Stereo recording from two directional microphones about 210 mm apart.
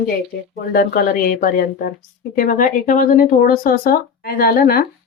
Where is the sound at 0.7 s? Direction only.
45° left (ahead or behind).